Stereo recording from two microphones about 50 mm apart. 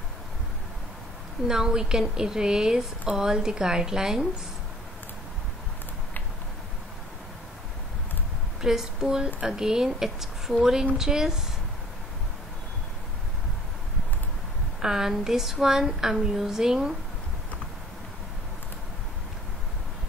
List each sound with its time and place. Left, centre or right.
1.5 s a woman's voice: centre
8.5 s a woman's voice: centre
14.8 s a woman's voice: centre